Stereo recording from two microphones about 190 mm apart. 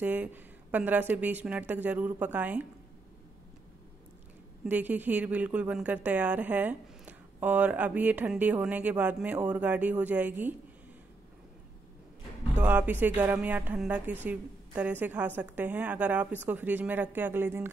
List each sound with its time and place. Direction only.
0.0 s a woman's voice: 10° right (ahead or behind)
4.6 s a woman's voice: 10° right (ahead or behind)
12.5 s a woman's voice: 10° right (ahead or behind)